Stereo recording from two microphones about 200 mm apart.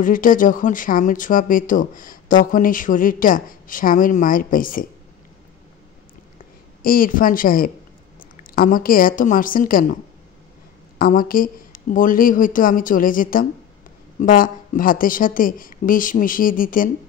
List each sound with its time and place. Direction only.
0.0 s speech: 45° left (ahead or behind)
6.8 s a woman's voice: 45° left (ahead or behind)
11.0 s speech: 45° left (ahead or behind)